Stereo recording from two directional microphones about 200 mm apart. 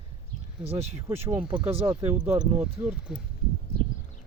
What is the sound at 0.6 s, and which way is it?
Speech, 30° right (ahead or behind).